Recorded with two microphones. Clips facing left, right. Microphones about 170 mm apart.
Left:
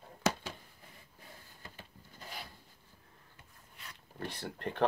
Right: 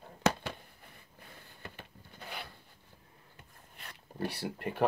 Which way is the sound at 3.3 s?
55° right (ahead or behind).